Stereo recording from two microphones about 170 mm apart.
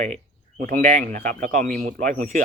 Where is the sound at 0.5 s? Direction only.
65° right (ahead or behind).